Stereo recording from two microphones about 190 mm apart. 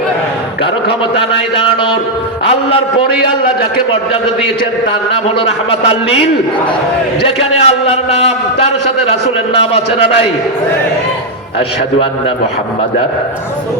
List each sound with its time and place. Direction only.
1.1 s a sound: 30° left (ahead or behind)
5.9 s a man's voice: 30° left (ahead or behind)
7.3 s a man's voice: 30° left (ahead or behind)